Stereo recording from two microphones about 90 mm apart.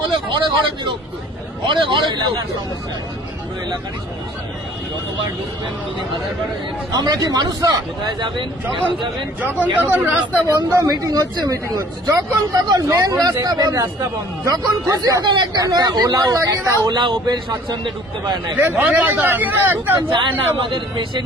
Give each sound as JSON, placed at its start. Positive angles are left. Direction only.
{"t": 0.3, "sound": "a man's voice", "side_deg": -60}
{"t": 6.9, "sound": "speech", "side_deg": -50}
{"t": 8.7, "sound": "speech", "side_deg": -65}
{"t": 9.4, "sound": "speech", "side_deg": -20}
{"t": 10.5, "sound": "speech", "side_deg": -35}
{"t": 15.2, "sound": "a man's voice", "side_deg": -55}
{"t": 15.6, "sound": "speech", "side_deg": -45}
{"t": 16.9, "sound": "speech", "side_deg": -60}
{"t": 18.5, "sound": "speech", "side_deg": -20}
{"t": 20.6, "sound": "a man's voice", "side_deg": -65}